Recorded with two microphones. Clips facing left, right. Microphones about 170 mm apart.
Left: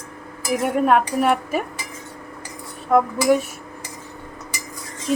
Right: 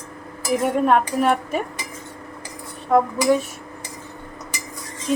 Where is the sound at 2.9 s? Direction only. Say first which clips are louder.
Even; 5° left (ahead or behind).